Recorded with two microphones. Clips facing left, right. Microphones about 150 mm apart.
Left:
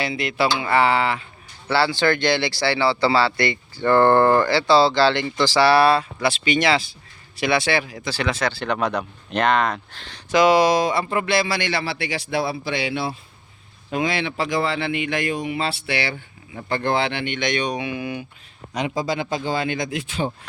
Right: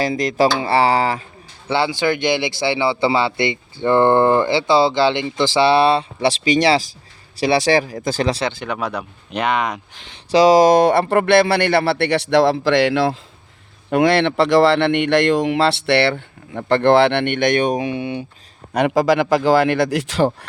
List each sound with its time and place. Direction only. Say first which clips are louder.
0.0 s speech: right 6 dB; 40° right (ahead or behind)
1.6 s speech: right 1 dB; 20° right (ahead or behind); by 8.4 s 35° right (ahead or behind)
8.6 s speech: left 1 dB; 10° right (ahead or behind)
10.3 s speech: right 5 dB; 35° right (ahead or behind); by 13.1 s 90° right
13.9 s speech: right 9 dB; 70° right (ahead or behind); by 17.8 s 50° right (ahead or behind)
17.8 s speech: right 4 dB; 30° right (ahead or behind)
18.7 s speech: right 9 dB; 65° right (ahead or behind); by 20.3 s 80° right